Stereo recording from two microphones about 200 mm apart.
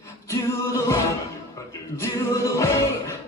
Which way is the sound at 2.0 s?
15° left (ahead or behind).